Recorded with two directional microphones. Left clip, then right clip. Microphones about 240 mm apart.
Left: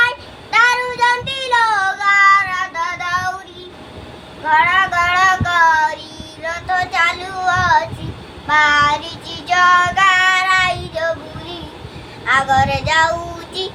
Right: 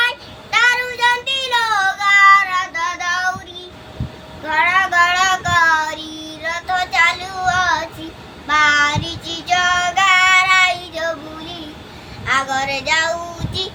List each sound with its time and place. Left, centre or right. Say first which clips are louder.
0.5 s child singing: left 1 dB; centre
4.4 s child singing: left 2 dB; centre
13.6 s music: even; centre